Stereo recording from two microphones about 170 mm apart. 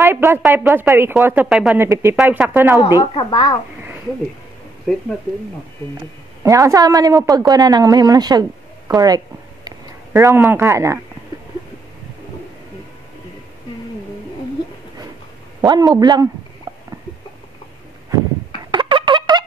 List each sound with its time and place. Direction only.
0.0 s speech: 15° right (ahead or behind)
3.2 s a child's voice: 25° left (ahead or behind)
6.4 s a woman's voice: 20° right (ahead or behind)
15.6 s a woman's voice: 25° right (ahead or behind)
18.7 s turkey: 30° right (ahead or behind)